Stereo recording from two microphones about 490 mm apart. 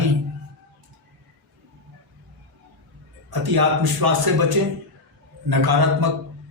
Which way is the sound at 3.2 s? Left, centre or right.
Right.